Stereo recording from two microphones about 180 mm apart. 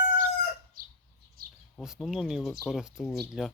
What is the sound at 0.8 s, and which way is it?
Bird, 50° right (ahead or behind).